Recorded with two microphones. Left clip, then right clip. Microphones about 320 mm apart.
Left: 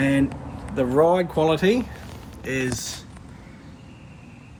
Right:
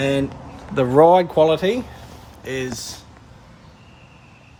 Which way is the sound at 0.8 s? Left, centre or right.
Right.